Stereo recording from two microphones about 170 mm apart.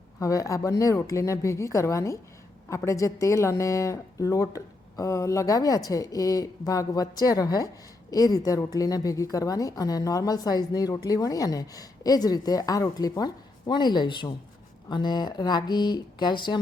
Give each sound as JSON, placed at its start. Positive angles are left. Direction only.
{"t": 0.2, "sound": "a woman's voice", "side_deg": 20}